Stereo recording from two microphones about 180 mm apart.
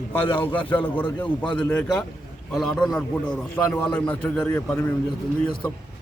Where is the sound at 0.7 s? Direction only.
10° left (ahead or behind).